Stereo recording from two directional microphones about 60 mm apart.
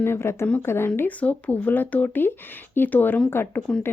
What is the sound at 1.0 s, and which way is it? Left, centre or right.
Speech, left.